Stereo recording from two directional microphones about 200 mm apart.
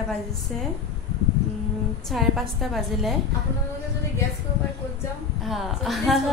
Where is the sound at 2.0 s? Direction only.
Centre (ahead or behind).